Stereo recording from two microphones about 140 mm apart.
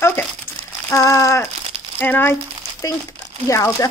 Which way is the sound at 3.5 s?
20° left (ahead or behind).